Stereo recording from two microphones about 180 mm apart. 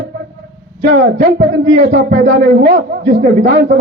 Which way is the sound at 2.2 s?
65° right (ahead or behind).